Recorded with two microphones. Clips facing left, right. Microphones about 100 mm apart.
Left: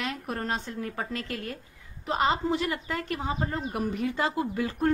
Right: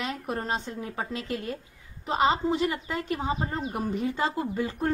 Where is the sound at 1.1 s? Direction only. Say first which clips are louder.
Right 2 dB; 50° left (ahead or behind).